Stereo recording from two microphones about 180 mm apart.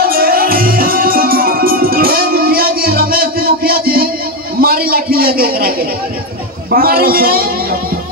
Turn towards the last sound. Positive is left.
turn(degrees=-55)  # may be behind; listen again after turning